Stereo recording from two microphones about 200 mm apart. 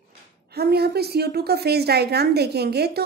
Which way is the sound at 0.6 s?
55° right (ahead or behind).